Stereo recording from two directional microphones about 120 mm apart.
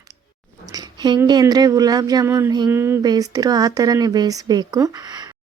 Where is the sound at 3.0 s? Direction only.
35° right (ahead or behind).